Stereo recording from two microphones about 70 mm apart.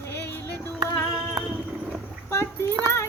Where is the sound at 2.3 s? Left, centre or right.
Left.